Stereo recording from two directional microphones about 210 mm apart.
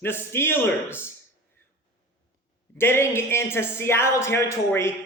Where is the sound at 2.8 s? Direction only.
10° left (ahead or behind).